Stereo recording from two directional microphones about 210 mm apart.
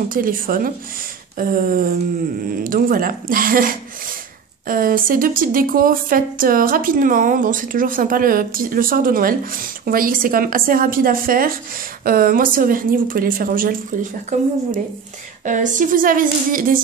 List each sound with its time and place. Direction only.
0.1 s speech: 40° right (ahead or behind)
15.4 s speech: 35° right (ahead or behind)